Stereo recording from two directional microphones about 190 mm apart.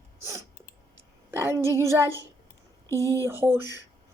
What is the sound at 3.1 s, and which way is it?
Speech, 15° right (ahead or behind).